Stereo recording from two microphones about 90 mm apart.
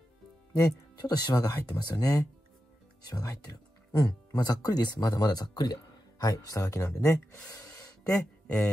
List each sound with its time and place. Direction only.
0.6 s speech: 45° left (ahead or behind)
7.4 s gasp: 40° left (ahead or behind)